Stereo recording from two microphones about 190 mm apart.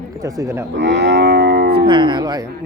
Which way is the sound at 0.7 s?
65° right (ahead or behind).